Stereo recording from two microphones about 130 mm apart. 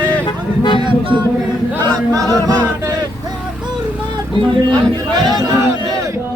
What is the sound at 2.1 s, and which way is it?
A capella, 25° right (ahead or behind).